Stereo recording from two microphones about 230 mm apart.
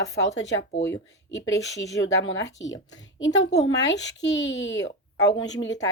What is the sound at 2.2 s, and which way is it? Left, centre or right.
A child's voice, left.